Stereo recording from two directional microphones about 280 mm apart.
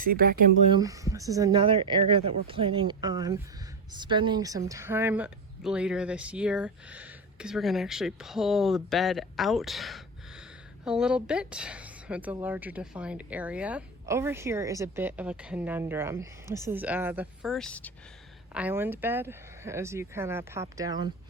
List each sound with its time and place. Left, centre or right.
0.0 s speech: right
0.7 s speech: centre
18.5 s speech: centre